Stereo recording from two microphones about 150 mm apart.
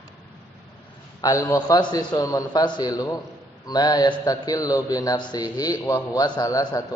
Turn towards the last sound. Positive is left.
turn(degrees=25)  # may be behind; listen again after turning